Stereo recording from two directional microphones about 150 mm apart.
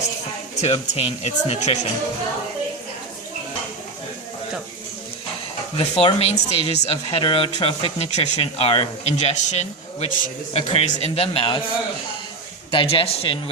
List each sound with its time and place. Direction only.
0.5 s speech: 45° left (ahead or behind)
5.7 s speech: 40° left (ahead or behind)
10.5 s speech: 40° left (ahead or behind)
12.7 s speech: 35° left (ahead or behind)